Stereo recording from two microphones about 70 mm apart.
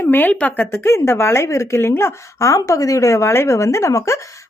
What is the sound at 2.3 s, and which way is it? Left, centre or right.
A woman's voice, left.